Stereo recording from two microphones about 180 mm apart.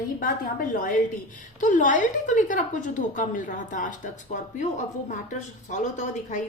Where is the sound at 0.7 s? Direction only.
50° left (ahead or behind).